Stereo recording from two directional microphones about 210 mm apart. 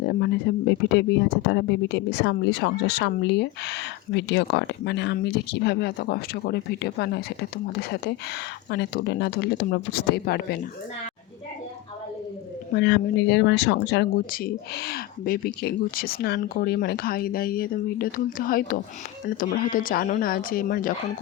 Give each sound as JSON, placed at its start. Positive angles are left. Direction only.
{"t": 0.0, "sound": "speech", "side_deg": 55}
{"t": 12.7, "sound": "speech", "side_deg": 55}